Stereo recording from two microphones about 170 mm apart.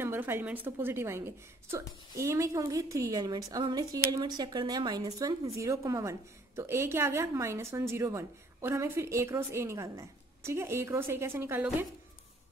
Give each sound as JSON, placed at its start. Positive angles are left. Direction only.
{"t": 0.0, "sound": "a woman's voice", "side_deg": -15}